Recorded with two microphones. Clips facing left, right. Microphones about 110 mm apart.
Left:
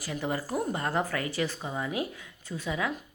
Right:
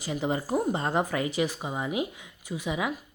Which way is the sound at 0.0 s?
20° right (ahead or behind).